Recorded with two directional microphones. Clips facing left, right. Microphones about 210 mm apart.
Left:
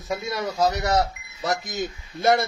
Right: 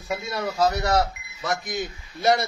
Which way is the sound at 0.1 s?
15° left (ahead or behind).